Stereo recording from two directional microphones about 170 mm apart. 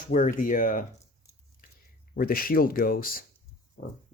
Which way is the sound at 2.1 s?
60° left (ahead or behind).